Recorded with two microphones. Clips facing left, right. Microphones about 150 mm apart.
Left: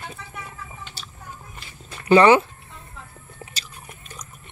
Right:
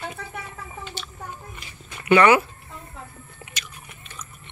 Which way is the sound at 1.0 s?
35° left (ahead or behind).